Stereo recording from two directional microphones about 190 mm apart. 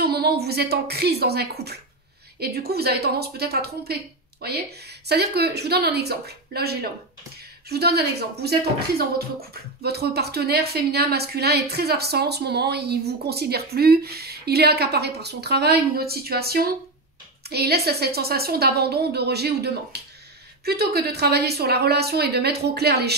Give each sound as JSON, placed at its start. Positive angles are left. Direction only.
{"t": 0.0, "sound": "speech", "side_deg": -55}